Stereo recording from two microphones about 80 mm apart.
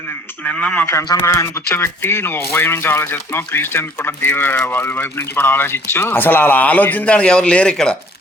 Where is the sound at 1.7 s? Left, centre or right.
Left.